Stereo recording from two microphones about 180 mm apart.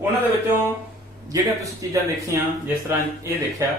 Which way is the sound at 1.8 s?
20° right (ahead or behind).